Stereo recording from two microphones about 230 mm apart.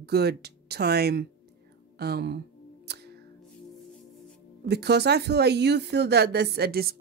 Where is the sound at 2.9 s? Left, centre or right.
Right.